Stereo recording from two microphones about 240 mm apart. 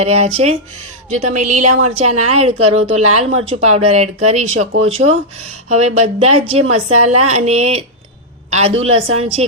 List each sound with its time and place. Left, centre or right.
0.0 s a woman's voice: right